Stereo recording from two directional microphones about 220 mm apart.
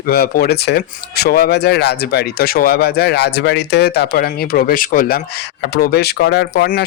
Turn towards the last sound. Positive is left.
turn(degrees=45)  # may be behind; listen again after turning